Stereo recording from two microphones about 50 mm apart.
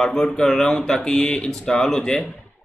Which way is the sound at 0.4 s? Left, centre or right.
Centre.